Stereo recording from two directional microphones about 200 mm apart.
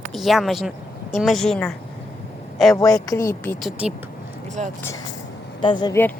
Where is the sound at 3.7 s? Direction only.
5° right (ahead or behind).